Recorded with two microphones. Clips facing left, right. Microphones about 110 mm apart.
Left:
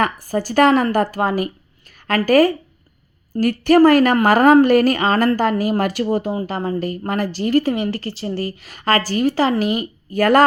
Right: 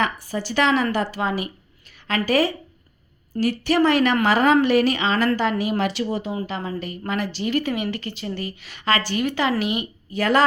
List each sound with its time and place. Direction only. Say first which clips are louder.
0.0 s a woman's voice: left 5 dB; 45° left (ahead or behind)